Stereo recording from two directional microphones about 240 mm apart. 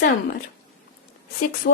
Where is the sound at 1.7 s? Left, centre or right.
Left.